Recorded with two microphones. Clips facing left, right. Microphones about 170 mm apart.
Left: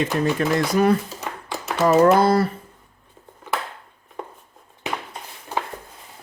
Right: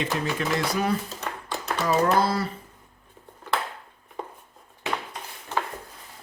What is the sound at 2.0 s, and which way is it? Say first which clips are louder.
Speech: left 7 dB; 55° left (ahead or behind).